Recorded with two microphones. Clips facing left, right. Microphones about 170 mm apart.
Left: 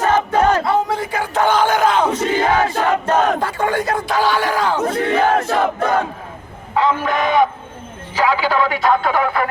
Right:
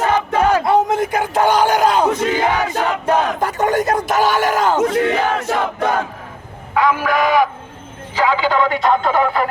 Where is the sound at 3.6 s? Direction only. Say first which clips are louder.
Right 2 dB; 45° right (ahead or behind).